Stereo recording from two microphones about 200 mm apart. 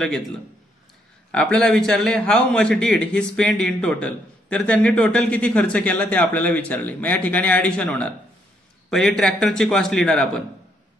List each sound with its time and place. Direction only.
1.3 s a man's voice: 5° left (ahead or behind)